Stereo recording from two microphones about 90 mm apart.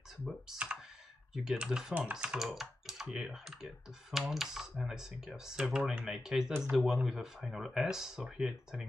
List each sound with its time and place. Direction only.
0.5 s speech: 10° right (ahead or behind)